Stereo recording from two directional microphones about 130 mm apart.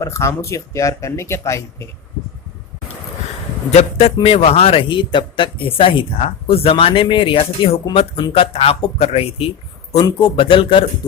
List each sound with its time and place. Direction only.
0.0 s speech: 25° left (ahead or behind)
3.7 s a man's voice: 55° left (ahead or behind)